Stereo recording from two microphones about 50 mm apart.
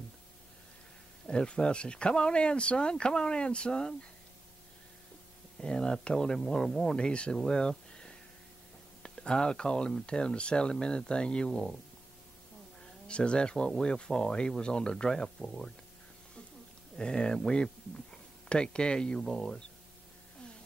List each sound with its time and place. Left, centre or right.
1.2 s speech: centre
5.6 s speech: centre
13.1 s speech: left
16.9 s speech: centre